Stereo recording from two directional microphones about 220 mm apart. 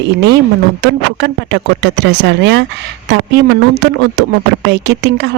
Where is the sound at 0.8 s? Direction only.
50° right (ahead or behind).